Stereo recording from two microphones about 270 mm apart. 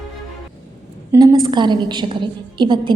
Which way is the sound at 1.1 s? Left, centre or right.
Centre.